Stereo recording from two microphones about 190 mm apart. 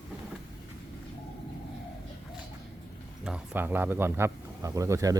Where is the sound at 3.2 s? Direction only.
5° right (ahead or behind).